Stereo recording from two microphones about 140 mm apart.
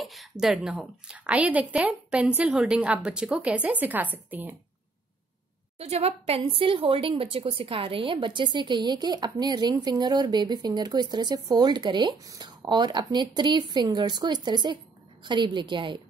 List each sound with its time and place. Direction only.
0.0 s a woman's voice: centre (ahead or behind)
5.8 s speech: 45° right (ahead or behind)